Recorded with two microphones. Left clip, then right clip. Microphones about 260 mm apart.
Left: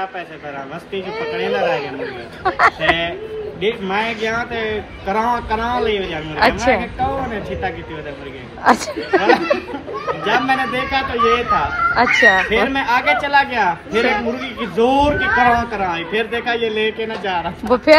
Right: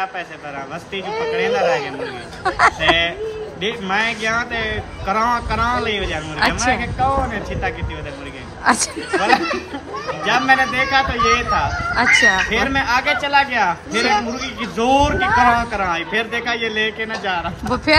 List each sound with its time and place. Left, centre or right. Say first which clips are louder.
1.1 s speech: right 2 dB; right
2.4 s speech: even; centre
8.6 s speech: left 2 dB; centre
15.1 s speech: even; right
15.7 s speech: even; centre